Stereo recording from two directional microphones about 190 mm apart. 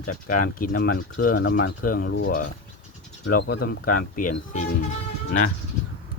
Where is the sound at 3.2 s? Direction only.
60° left (ahead or behind); by 4.7 s 40° left (ahead or behind).